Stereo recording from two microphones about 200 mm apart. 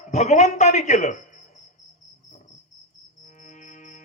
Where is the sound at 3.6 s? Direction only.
40° left (ahead or behind).